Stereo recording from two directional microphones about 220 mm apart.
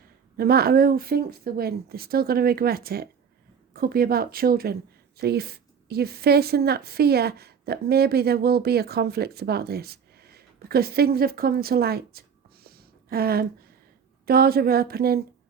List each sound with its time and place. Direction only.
0.3 s speech: 45° right (ahead or behind)
12.6 s a sound: 45° right (ahead or behind)
14.3 s speech: 45° right (ahead or behind)